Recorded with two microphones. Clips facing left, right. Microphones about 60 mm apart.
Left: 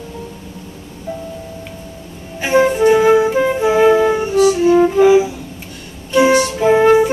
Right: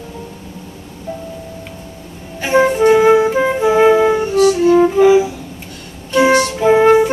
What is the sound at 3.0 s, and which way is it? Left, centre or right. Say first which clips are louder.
Music: right 1 dB; centre.